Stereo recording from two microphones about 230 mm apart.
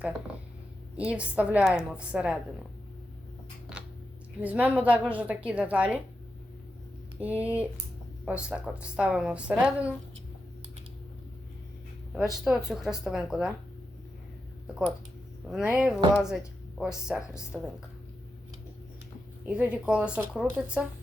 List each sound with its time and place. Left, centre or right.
0.9 s a woman's voice: centre
4.4 s a woman's voice: centre
7.2 s a woman's voice: centre
12.1 s a woman's voice: centre
15.4 s a woman's voice: centre
19.5 s a woman's voice: centre